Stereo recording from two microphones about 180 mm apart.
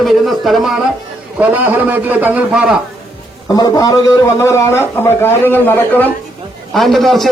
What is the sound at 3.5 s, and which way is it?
A man's voice, 20° left (ahead or behind).